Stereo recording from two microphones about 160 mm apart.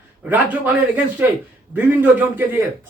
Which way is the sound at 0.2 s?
10° right (ahead or behind).